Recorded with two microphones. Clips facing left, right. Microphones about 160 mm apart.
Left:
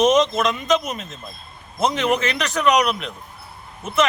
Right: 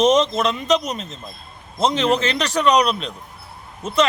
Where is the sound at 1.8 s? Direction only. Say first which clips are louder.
Right 1 dB; 30° right (ahead or behind).